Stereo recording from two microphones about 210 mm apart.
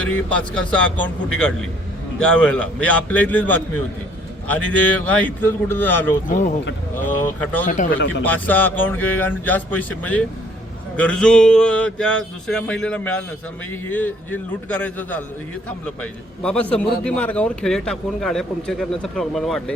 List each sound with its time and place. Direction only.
0.0 s speech: 5° left (ahead or behind)
6.2 s speech: 35° left (ahead or behind)
6.9 s speech: 10° left (ahead or behind)
7.6 s speech: 40° left (ahead or behind)
8.2 s speech: 10° left (ahead or behind)
16.4 s speech: 5° left (ahead or behind)